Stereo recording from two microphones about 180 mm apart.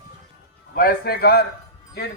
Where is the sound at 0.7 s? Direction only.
55° left (ahead or behind).